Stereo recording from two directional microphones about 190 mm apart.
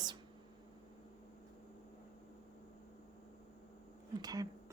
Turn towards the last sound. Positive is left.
turn(degrees=-20)  # may be behind; listen again after turning